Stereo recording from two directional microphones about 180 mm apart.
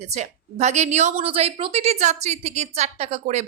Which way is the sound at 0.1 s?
40° right (ahead or behind).